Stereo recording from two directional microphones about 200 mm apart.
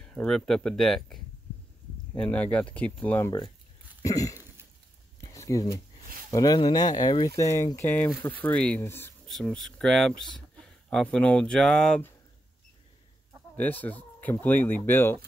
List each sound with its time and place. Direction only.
0.0 s speech: 5° left (ahead or behind)
4.0 s a sound: 15° left (ahead or behind)
6.3 s speech: 20° left (ahead or behind); by 12.1 s 5° left (ahead or behind)
13.6 s speech: 10° left (ahead or behind)